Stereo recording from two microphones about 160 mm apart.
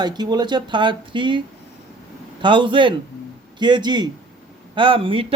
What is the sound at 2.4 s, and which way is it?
Speech, 30° right (ahead or behind).